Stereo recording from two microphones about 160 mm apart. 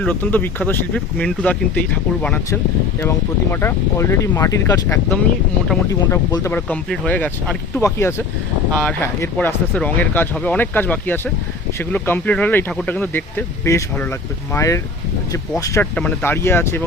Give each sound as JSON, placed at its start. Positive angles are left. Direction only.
{"t": 0.0, "sound": "speech", "side_deg": 10}